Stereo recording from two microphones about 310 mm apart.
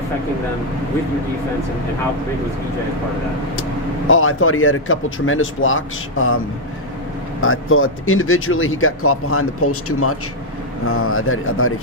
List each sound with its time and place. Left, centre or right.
4.1 s speech: left
7.4 s speech: left